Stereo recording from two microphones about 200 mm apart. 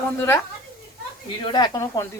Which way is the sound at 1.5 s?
20° left (ahead or behind).